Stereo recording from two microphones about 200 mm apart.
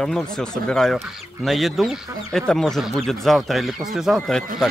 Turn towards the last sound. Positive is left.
turn(degrees=0)  # may be behind; listen again after turning